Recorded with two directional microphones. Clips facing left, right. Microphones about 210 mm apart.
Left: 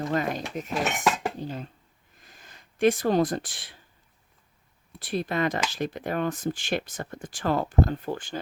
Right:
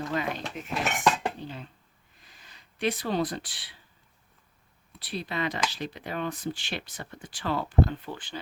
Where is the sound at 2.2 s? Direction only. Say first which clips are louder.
Left 4 dB; 45° left (ahead or behind).